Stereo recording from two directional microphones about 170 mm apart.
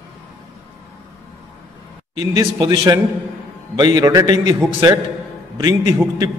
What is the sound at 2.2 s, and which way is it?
A man's voice, 20° right (ahead or behind).